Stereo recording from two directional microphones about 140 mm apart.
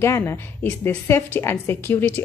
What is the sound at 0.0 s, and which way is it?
A woman's voice, 20° left (ahead or behind).